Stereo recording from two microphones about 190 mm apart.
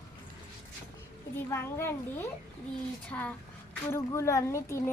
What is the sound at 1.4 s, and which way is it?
A child's voice, 15° left (ahead or behind).